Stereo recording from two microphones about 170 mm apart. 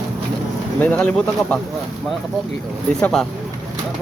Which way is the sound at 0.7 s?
10° left (ahead or behind).